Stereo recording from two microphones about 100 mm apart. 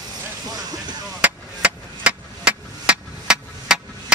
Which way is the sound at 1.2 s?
10° right (ahead or behind).